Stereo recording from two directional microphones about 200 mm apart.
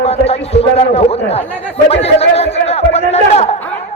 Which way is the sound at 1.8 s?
30° left (ahead or behind).